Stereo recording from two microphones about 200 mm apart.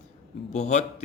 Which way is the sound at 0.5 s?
35° left (ahead or behind).